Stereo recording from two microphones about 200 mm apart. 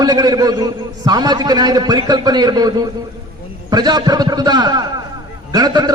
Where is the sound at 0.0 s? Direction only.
20° right (ahead or behind).